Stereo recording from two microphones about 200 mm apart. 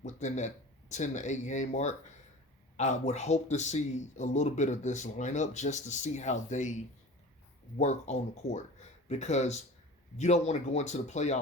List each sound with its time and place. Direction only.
0.0 s speech: 35° left (ahead or behind)
7.8 s speech: 35° left (ahead or behind)